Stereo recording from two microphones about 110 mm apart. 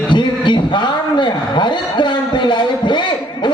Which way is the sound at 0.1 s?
45° left (ahead or behind).